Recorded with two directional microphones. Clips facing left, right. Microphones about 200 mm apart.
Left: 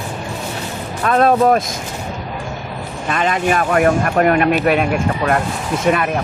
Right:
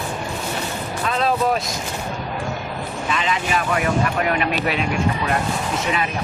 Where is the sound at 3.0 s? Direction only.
50° left (ahead or behind).